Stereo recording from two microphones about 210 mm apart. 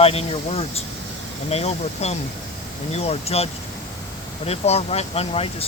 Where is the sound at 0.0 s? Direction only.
30° left (ahead or behind).